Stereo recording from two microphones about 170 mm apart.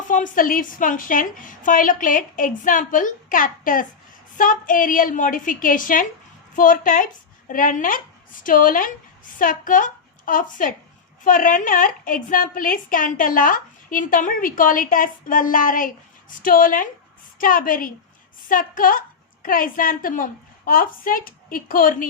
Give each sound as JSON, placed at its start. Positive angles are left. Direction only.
{"t": 0.1, "sound": "a woman's voice", "side_deg": 50}